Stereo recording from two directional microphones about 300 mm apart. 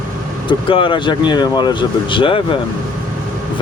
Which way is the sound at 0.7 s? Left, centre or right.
Centre.